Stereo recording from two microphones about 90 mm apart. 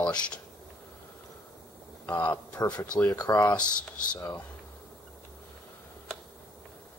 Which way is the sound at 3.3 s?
25° left (ahead or behind).